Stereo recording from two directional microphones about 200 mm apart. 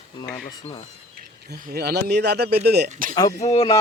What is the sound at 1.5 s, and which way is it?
Speech, 55° right (ahead or behind).